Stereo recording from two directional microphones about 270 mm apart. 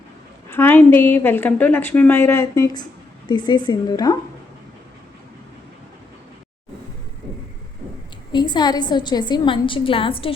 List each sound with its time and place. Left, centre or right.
0.4 s a woman's voice: centre
8.3 s a woman's voice: centre